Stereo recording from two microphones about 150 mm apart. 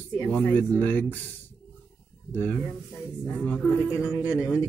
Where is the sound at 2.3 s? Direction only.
10° left (ahead or behind).